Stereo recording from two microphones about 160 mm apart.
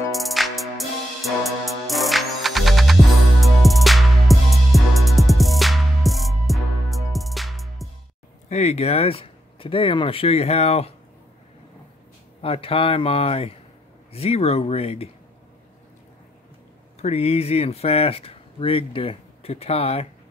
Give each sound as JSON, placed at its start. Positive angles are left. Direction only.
{"t": 0.1, "sound": "music", "side_deg": 0}
{"t": 8.5, "sound": "speech", "side_deg": 45}
{"t": 12.4, "sound": "speech", "side_deg": 35}
{"t": 17.0, "sound": "speech", "side_deg": 40}